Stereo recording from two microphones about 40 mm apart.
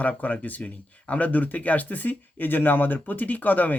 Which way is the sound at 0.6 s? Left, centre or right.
Left.